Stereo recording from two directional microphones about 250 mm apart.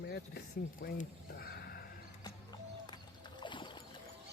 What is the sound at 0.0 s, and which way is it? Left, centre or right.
Speech, left.